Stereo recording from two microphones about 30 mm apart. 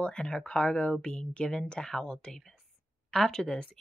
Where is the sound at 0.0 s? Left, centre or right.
Left.